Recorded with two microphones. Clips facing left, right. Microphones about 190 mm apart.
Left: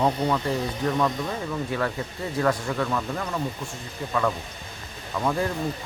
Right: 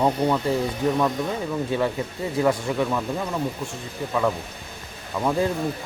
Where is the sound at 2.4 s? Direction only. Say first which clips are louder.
Right 3 dB; 15° right (ahead or behind).